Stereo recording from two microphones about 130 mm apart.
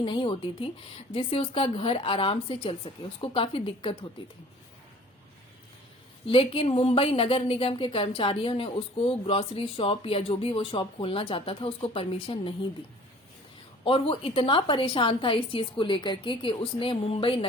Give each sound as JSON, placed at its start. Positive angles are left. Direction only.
{"t": 0.0, "sound": "a woman's voice", "side_deg": 40}
{"t": 6.2, "sound": "a woman's voice", "side_deg": 45}
{"t": 13.8, "sound": "a woman's voice", "side_deg": 45}